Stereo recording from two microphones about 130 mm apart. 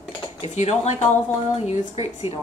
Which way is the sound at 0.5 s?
60° left (ahead or behind).